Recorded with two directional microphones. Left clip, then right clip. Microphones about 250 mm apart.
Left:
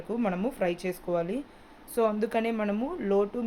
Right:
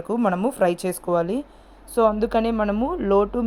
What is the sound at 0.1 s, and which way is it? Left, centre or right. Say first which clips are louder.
Speech: right 8 dB; right.